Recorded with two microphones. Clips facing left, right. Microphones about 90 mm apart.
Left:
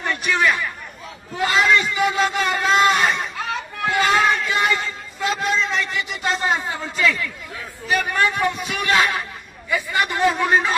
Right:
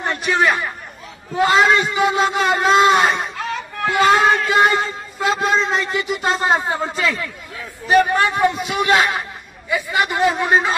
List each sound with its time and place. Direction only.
0.0 s a man's voice: 35° right (ahead or behind)